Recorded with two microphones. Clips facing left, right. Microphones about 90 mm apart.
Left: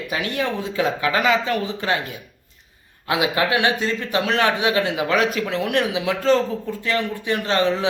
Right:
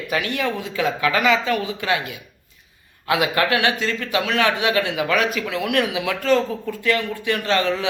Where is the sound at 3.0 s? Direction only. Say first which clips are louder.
Right 1 dB; 20° left (ahead or behind).